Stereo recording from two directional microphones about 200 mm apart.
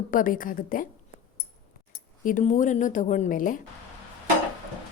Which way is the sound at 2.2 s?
40° left (ahead or behind).